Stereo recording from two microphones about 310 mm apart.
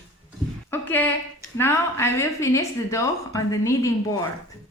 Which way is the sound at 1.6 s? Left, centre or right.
Centre.